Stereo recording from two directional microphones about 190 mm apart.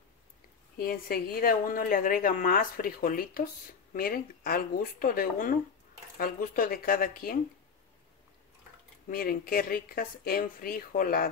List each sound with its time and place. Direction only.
0.7 s a woman's voice: 50° left (ahead or behind)
9.1 s a woman's voice: 50° left (ahead or behind)